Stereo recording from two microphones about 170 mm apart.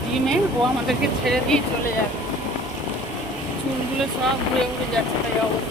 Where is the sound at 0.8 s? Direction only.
Centre (ahead or behind).